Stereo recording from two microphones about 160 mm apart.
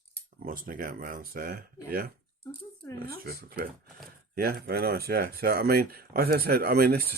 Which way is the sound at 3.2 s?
70° right (ahead or behind).